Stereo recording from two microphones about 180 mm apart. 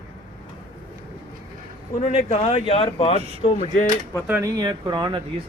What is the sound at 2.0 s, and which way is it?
Speech, 35° left (ahead or behind).